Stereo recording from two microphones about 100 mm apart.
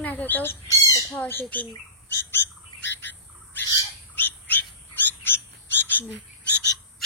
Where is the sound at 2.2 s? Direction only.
20° left (ahead or behind).